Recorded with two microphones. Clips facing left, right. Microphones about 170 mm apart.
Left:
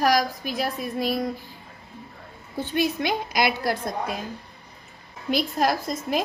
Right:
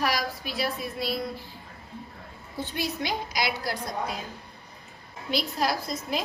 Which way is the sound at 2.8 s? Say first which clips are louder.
Left 7 dB; 55° left (ahead or behind).